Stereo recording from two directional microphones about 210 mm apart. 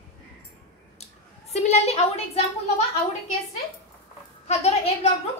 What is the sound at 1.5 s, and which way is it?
Speech, 30° left (ahead or behind).